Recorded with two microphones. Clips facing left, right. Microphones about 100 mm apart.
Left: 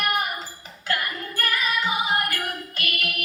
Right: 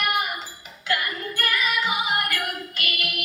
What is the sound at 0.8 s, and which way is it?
Music, 40° left (ahead or behind).